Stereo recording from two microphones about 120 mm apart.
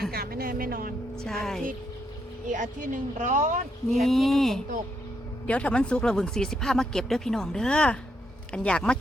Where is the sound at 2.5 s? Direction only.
90° right.